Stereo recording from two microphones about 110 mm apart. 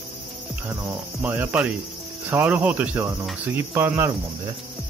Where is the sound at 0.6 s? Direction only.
20° right (ahead or behind).